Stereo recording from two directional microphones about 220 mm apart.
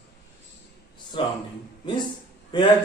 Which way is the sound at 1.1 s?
20° left (ahead or behind).